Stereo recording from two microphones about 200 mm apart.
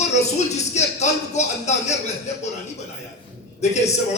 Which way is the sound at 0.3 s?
35° left (ahead or behind).